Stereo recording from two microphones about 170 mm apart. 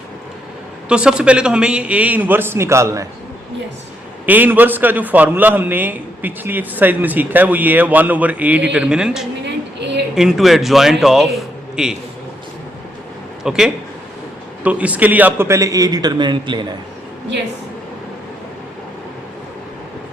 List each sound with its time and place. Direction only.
0.9 s a man's voice: 5° right (ahead or behind)
4.3 s a man's voice: 10° right (ahead or behind)
9.4 s a sound: 90° right
10.2 s a man's voice: centre (ahead or behind)
13.4 s a man's voice: 5° right (ahead or behind); by 16.6 s 25° right (ahead or behind)